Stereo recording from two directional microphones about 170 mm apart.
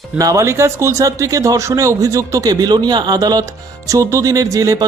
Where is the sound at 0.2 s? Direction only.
20° right (ahead or behind).